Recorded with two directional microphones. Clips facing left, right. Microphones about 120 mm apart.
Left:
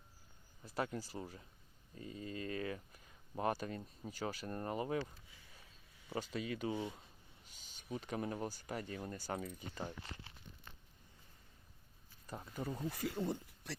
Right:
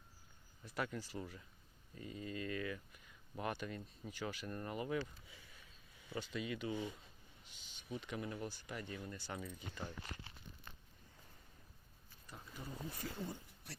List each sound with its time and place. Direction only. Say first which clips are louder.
0.6 s speech: left 2 dB; 35° left (ahead or behind)
6.1 s speech: left 2 dB; 40° left (ahead or behind)
12.3 s speech: left 8 dB; 45° left (ahead or behind)
12.9 s speech: left 7 dB; 90° left